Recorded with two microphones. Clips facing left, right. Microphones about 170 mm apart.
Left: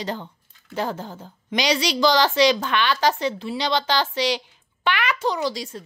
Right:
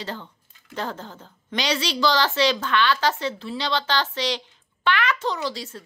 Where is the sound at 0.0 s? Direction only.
15° left (ahead or behind).